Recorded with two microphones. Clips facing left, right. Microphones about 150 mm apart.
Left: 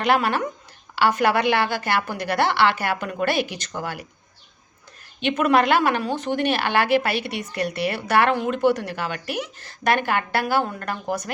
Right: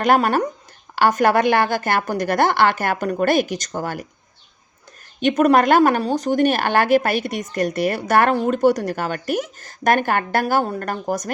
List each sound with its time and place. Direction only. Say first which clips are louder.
0.0 s a woman's voice: right 4 dB; 45° right (ahead or behind)
5.2 s a woman's voice: right 4 dB; 45° right (ahead or behind)